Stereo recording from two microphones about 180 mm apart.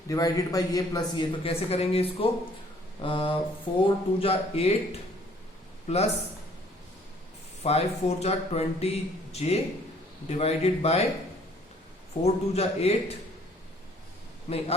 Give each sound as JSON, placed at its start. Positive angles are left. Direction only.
{"t": 0.1, "sound": "a man's voice", "side_deg": 20}
{"t": 7.6, "sound": "a man's voice", "side_deg": 35}
{"t": 12.2, "sound": "a man's voice", "side_deg": 35}
{"t": 14.5, "sound": "a man's voice", "side_deg": 40}